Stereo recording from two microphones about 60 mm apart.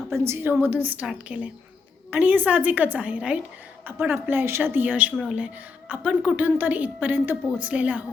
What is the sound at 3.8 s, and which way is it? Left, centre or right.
A woman's voice, right.